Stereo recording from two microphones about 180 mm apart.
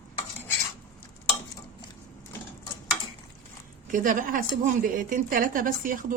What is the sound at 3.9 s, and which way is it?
A woman's voice, 45° right (ahead or behind).